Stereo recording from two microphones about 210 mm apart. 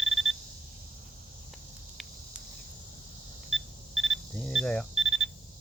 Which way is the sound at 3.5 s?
Centre (ahead or behind).